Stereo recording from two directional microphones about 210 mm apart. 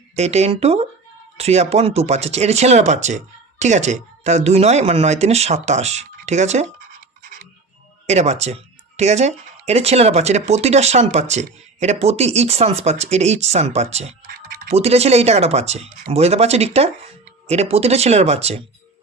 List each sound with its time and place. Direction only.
0.2 s speech: 30° right (ahead or behind)
8.0 s speech: 30° right (ahead or behind)
14.7 s speech: 30° right (ahead or behind)